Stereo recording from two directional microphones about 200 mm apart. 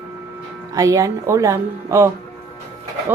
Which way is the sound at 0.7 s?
15° right (ahead or behind).